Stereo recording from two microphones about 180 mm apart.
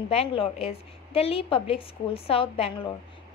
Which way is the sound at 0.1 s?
30° left (ahead or behind).